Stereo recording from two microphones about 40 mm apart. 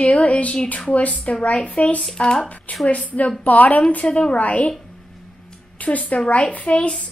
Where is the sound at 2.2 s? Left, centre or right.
Left.